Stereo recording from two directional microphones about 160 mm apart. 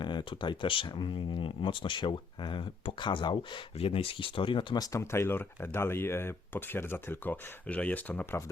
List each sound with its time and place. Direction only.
0.0 s speech: 30° left (ahead or behind); by 8.4 s 15° left (ahead or behind)